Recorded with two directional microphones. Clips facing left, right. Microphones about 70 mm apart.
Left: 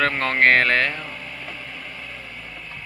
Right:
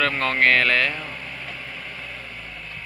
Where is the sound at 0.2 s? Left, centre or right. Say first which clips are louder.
Left 2 dB; left.